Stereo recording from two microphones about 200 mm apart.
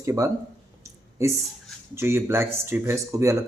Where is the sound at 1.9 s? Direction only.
10° right (ahead or behind).